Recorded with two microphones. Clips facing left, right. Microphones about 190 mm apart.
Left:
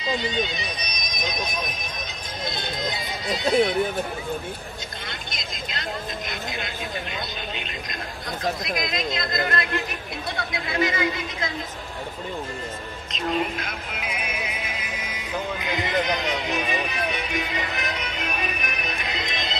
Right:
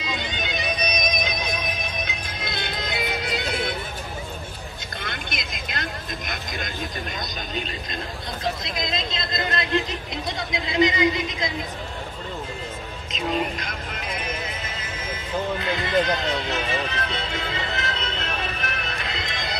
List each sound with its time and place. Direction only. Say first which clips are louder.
0.5 s music: right 6 dB; 65° right (ahead or behind)
5.0 s vehicle: right 3 dB; 60° right (ahead or behind)
8.6 s speech: left 2 dB; 25° right (ahead or behind)
13.1 s music: even; centre (ahead or behind); by 19.6 s 20° left (ahead or behind)